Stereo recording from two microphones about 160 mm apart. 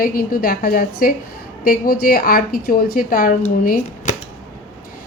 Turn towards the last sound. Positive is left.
turn(degrees=55)  # may be behind; listen again after turning